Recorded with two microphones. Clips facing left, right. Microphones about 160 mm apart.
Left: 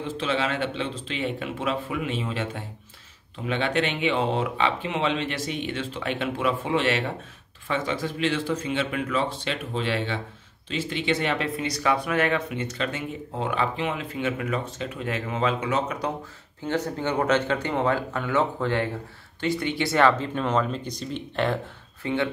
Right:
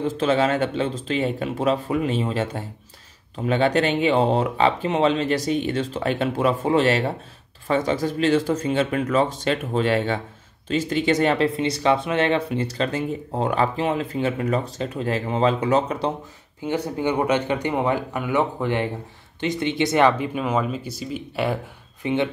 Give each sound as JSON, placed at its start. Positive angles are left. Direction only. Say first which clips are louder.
{"t": 0.2, "sound": "speech", "louder": "right 6 dB", "side_deg": -45}
{"t": 16.6, "sound": "speech", "louder": "right 3 dB", "side_deg": -10}
{"t": 22.0, "sound": "speech", "louder": "right 3 dB", "side_deg": -20}